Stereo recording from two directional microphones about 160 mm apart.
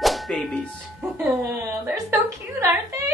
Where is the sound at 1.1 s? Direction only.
15° right (ahead or behind).